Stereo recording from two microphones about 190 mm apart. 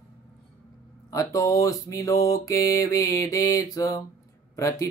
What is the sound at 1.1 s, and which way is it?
Mantra, 15° left (ahead or behind).